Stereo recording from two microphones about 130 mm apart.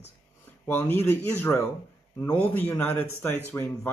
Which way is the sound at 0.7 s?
15° left (ahead or behind).